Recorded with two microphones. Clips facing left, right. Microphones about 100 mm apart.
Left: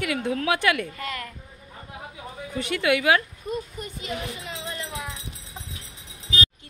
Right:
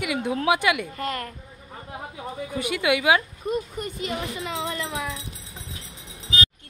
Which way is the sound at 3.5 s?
70° right (ahead or behind).